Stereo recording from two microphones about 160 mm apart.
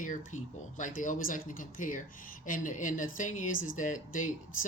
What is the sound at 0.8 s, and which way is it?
Speech, 55° left (ahead or behind).